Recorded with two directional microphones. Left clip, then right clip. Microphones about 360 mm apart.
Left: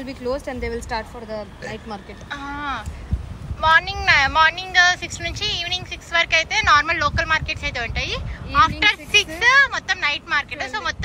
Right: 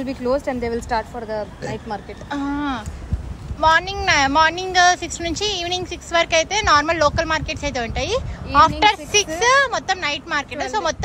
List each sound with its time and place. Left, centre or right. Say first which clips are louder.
0.0 s speech: right 5 dB; right
2.2 s speech: right 3 dB; centre